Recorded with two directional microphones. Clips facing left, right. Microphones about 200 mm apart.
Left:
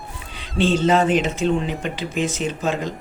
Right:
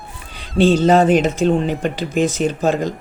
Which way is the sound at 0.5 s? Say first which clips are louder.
Right 5 dB; 40° right (ahead or behind).